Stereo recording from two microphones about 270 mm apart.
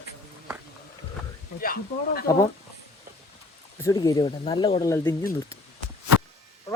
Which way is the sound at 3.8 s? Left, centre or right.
Centre.